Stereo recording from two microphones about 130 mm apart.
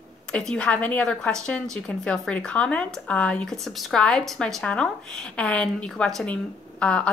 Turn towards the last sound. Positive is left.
turn(degrees=10)  # may be behind; listen again after turning